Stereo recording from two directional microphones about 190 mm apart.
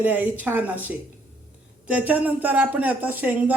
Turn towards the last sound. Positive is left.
turn(degrees=-10)  # may be behind; listen again after turning